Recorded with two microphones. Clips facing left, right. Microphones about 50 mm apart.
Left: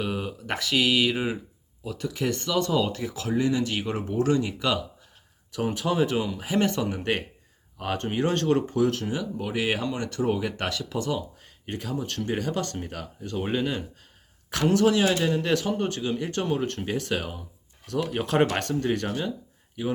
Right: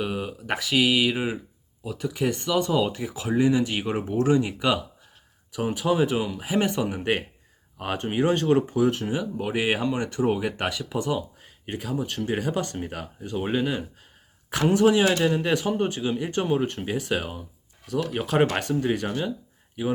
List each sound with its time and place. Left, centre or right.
0.0 s speech: centre
5.5 s speech: centre